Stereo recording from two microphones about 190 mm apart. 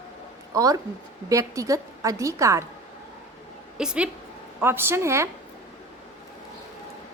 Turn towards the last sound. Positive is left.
turn(degrees=-15)  # may be behind; listen again after turning